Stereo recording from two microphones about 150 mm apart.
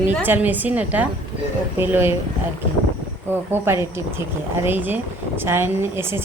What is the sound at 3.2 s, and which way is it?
Speech, 15° right (ahead or behind).